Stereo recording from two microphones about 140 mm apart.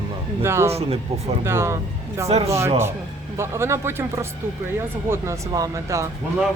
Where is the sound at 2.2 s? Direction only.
50° right (ahead or behind).